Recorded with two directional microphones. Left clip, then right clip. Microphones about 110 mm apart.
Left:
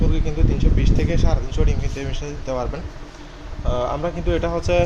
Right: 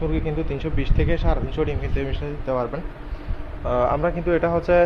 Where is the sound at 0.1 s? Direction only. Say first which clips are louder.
Right 1 dB; 30° right (ahead or behind).